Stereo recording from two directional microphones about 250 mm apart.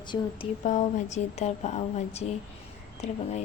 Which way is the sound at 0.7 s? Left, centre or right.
Left.